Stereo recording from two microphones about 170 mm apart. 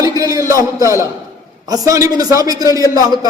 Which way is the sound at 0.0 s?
20° right (ahead or behind).